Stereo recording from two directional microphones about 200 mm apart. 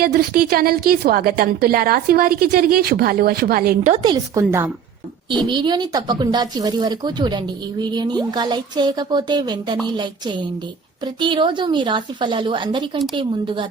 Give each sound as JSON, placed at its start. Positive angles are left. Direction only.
{"t": 0.0, "sound": "a woman's voice", "side_deg": -50}
{"t": 3.9, "sound": "speech", "side_deg": -25}